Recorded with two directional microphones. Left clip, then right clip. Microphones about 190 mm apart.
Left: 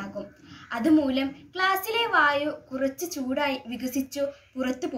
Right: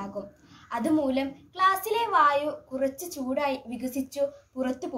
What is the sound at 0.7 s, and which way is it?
Speech, 5° right (ahead or behind).